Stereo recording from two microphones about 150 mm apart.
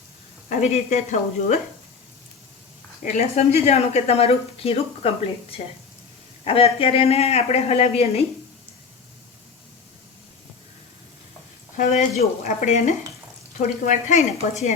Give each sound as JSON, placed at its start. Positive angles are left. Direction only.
{"t": 0.6, "sound": "a man's voice", "side_deg": 45}
{"t": 3.0, "sound": "a woman's voice", "side_deg": 65}
{"t": 3.3, "sound": "a woman's voice", "side_deg": 45}
{"t": 11.8, "sound": "a man's voice", "side_deg": 50}